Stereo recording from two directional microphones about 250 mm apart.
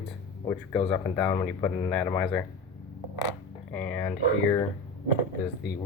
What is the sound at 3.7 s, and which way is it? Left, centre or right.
Speech, centre.